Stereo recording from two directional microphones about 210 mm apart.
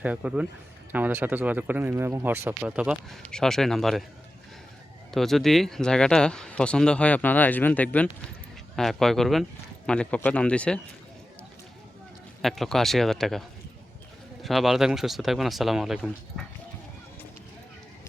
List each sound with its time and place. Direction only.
0.0 s speech: 5° right (ahead or behind)
5.1 s speech: centre (ahead or behind)
12.4 s speech: centre (ahead or behind)
14.4 s speech: centre (ahead or behind)